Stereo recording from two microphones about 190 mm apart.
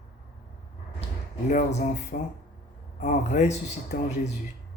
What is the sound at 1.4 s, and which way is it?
Speech, 40° left (ahead or behind).